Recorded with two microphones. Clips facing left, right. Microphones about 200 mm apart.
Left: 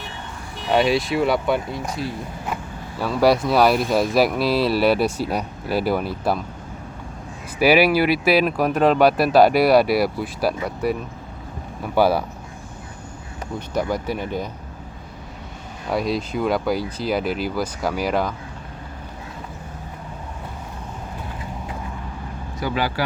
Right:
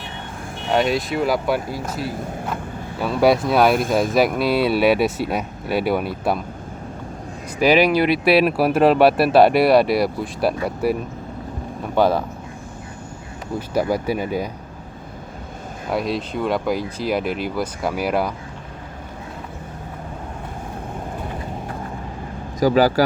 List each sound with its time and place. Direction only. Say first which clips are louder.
0.7 s speech: left 1 dB; centre (ahead or behind)
3.7 s speech: right 1 dB; 50° right (ahead or behind)
3.9 s speech: right 1 dB; centre (ahead or behind)
7.6 s speech: even; 10° left (ahead or behind)
11.9 s speech: even; 10° left (ahead or behind)
13.6 s speech: right 3 dB; 10° right (ahead or behind)
15.9 s speech: even; centre (ahead or behind)
22.6 s speech: right 9 dB; 40° right (ahead or behind)